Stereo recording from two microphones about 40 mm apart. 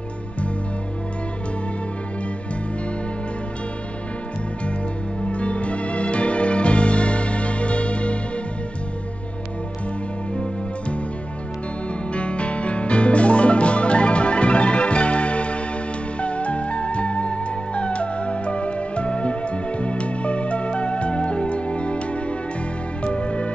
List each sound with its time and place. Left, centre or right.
5.2 s music: left
10.3 s music: left
12.1 s music: left